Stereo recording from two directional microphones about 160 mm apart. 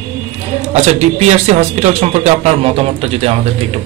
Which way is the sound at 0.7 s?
45° right (ahead or behind).